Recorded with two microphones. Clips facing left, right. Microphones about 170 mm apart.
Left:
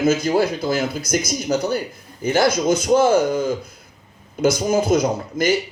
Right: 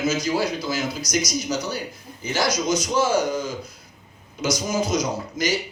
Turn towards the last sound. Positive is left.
turn(degrees=55)  # may be behind; listen again after turning